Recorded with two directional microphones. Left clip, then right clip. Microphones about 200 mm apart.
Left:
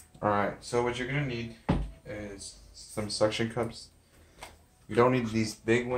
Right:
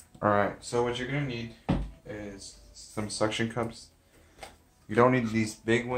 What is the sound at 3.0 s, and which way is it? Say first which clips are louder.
Speech: left 1 dB; 15° right (ahead or behind).